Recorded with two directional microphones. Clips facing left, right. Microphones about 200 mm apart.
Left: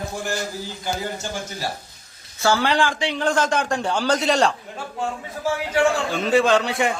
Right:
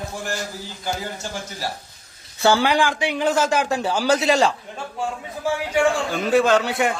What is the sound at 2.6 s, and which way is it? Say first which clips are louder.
A man's voice: right 1 dB; 10° right (ahead or behind).